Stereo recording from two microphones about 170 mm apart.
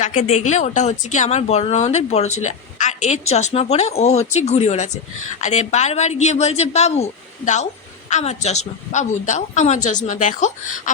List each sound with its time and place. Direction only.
0.0 s a woman's voice: 40° left (ahead or behind)